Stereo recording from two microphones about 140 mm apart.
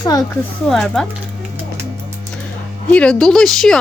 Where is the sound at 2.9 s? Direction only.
5° left (ahead or behind).